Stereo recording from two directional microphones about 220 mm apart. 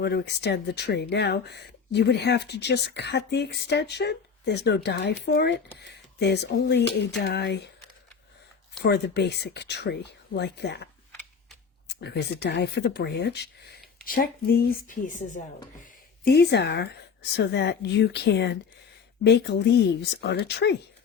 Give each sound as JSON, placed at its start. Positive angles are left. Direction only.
{"t": 0.0, "sound": "speech", "side_deg": 50}
{"t": 8.8, "sound": "speech", "side_deg": 50}
{"t": 11.9, "sound": "speech", "side_deg": 50}
{"t": 16.2, "sound": "speech", "side_deg": 50}